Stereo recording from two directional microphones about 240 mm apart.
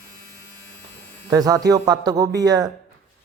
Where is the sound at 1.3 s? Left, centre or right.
Centre.